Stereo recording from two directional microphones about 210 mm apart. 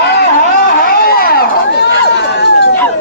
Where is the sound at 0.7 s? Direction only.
45° left (ahead or behind).